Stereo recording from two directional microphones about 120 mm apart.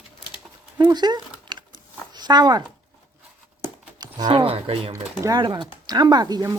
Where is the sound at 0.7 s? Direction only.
35° right (ahead or behind).